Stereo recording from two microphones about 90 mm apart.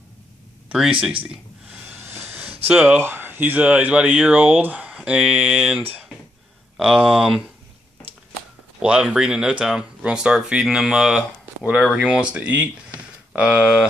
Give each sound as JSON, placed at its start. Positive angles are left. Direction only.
{"t": 2.0, "sound": "a sound", "side_deg": -15}
{"t": 3.0, "sound": "speech", "side_deg": -25}
{"t": 6.8, "sound": "speech", "side_deg": -5}
{"t": 8.7, "sound": "speech", "side_deg": -10}